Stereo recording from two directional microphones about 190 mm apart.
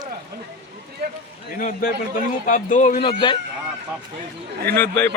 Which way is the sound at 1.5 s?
50° left (ahead or behind).